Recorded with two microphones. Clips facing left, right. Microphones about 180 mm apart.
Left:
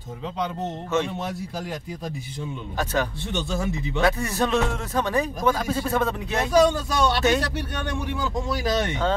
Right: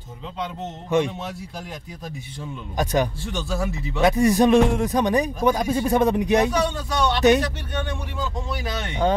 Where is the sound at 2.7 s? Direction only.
15° right (ahead or behind).